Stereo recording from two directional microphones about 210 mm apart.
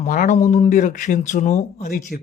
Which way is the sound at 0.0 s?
35° left (ahead or behind).